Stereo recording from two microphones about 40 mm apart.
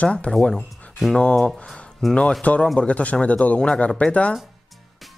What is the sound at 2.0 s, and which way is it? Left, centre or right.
Speech, centre.